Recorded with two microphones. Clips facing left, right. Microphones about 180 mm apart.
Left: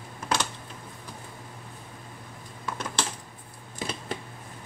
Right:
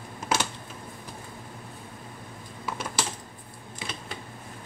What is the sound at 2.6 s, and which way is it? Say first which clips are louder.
Typing: even; 5° right (ahead or behind).